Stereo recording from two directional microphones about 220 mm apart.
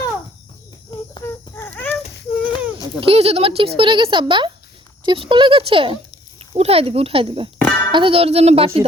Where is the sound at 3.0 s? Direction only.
25° right (ahead or behind).